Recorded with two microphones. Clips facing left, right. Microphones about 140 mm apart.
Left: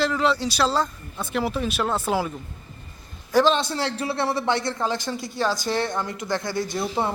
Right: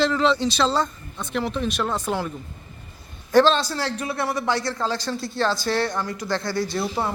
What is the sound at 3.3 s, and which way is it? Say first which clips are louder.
A man's voice: right 2 dB; 15° left (ahead or behind).